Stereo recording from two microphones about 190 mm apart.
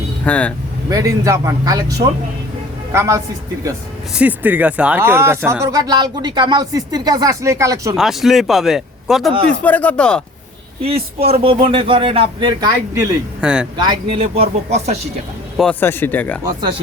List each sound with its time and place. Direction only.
0.3 s speech: 5° left (ahead or behind)
0.9 s a woman's voice: 15° right (ahead or behind)
7.9 s speech: centre (ahead or behind)
10.8 s speech: 30° right (ahead or behind)
13.4 s speech: 5° right (ahead or behind)
13.7 s speech: 20° right (ahead or behind)
15.5 s speech: 5° left (ahead or behind)
16.6 s speech: 25° right (ahead or behind)